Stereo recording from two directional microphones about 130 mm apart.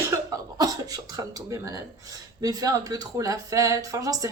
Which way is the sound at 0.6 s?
30° right (ahead or behind).